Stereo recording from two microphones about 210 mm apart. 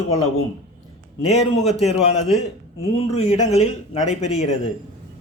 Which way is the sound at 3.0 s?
30° left (ahead or behind).